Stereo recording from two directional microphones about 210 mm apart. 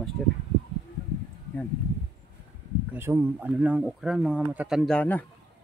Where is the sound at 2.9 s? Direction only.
10° right (ahead or behind); by 5.2 s 5° left (ahead or behind).